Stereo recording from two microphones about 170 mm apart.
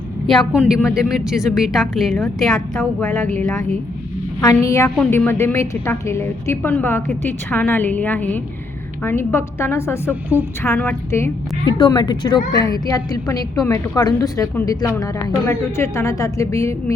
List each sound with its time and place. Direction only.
0.3 s speech: centre (ahead or behind)
3.0 s a woman's voice: 15° left (ahead or behind)
4.4 s a woman's voice: 20° left (ahead or behind)
10.1 s a woman's voice: 10° right (ahead or behind)
10.6 s a woman's voice: 15° left (ahead or behind)
11.6 s a woman's voice: 25° left (ahead or behind)